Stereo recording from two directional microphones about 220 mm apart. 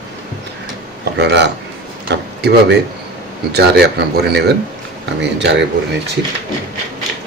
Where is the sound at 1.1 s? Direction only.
50° right (ahead or behind).